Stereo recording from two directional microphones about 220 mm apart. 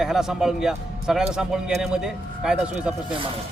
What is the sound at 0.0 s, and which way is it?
Speech, centre (ahead or behind).